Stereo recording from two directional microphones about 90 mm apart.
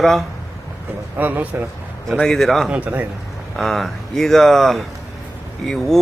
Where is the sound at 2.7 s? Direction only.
15° right (ahead or behind).